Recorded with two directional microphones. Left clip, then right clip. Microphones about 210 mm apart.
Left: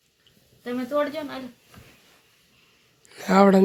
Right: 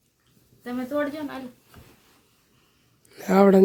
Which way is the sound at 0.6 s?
15° right (ahead or behind).